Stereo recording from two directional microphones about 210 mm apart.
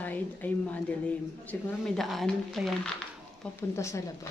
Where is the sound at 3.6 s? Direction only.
15° left (ahead or behind).